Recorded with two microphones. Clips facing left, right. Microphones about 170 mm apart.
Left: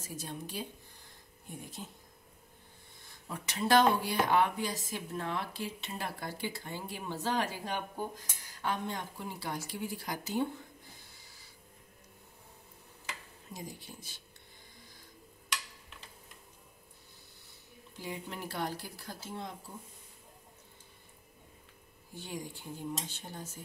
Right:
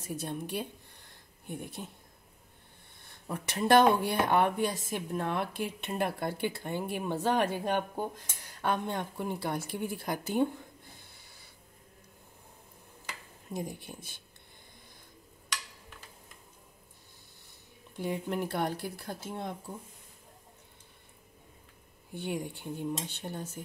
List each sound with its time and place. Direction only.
0.0 s speech: 60° right (ahead or behind)
3.3 s speech: 55° right (ahead or behind)
13.5 s speech: 55° right (ahead or behind)
17.9 s speech: 60° right (ahead or behind)
22.1 s speech: 60° right (ahead or behind)